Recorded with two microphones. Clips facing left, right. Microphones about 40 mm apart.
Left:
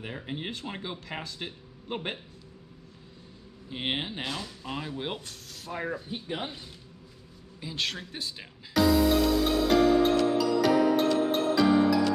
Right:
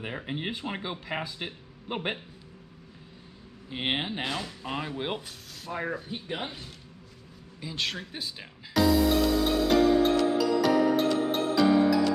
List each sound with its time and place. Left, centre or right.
0.0 s speech: centre
3.7 s speech: centre
7.6 s music: centre